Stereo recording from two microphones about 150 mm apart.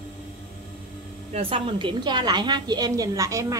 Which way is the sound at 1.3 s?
40° right (ahead or behind).